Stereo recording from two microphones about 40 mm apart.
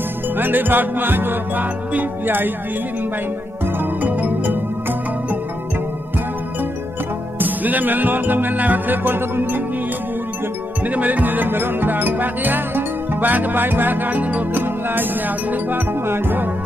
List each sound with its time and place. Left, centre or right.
0.4 s music: right
4.0 s music: right
7.3 s music: right
10.9 s music: right
14.6 s music: right